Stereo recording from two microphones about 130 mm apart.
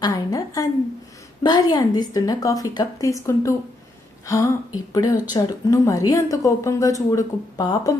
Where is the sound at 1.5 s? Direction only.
35° left (ahead or behind).